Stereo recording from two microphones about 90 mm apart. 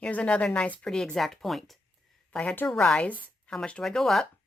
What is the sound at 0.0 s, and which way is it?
Speech, 10° left (ahead or behind).